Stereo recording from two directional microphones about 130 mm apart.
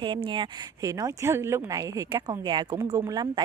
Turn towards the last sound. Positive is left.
turn(degrees=-30)  # may be behind; listen again after turning